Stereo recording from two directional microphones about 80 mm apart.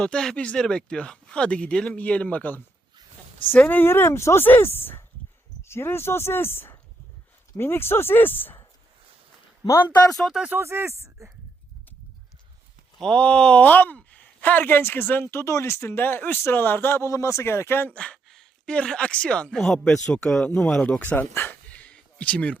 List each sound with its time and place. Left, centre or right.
0.0 s speech: centre
3.7 s speech: left
10.1 s speech: centre
10.5 s speech: right
13.0 s speech: centre; by 17.9 s left
17.9 s speech: centre
21.0 s speech: centre
21.3 s a sound: left